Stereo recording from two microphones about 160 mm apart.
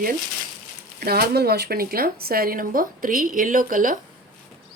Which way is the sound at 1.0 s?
80° right.